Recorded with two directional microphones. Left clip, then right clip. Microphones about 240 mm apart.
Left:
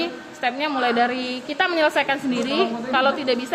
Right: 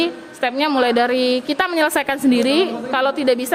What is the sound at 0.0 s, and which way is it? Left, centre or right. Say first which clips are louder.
A woman's voice: right 4 dB; right.